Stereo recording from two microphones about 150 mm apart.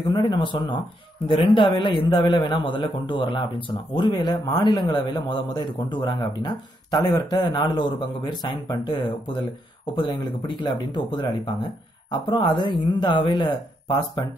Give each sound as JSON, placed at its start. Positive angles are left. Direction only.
{"t": 0.1, "sound": "a man's voice", "side_deg": 30}